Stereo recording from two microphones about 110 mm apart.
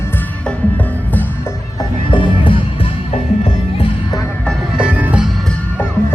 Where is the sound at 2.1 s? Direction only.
50° left (ahead or behind).